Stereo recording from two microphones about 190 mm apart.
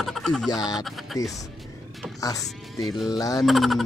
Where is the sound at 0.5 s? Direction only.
20° left (ahead or behind).